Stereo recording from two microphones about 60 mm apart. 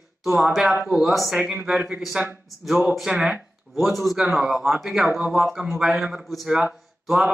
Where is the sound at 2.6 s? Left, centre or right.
Centre.